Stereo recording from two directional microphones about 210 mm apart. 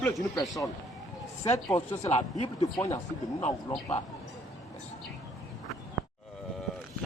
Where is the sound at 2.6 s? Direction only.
15° left (ahead or behind).